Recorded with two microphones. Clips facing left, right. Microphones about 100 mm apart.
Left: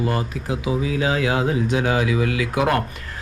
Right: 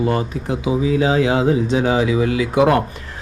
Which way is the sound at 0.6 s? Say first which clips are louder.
Right 5 dB; 35° right (ahead or behind).